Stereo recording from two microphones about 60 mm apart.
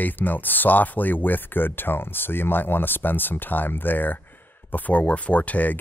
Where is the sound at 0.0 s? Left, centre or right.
Left.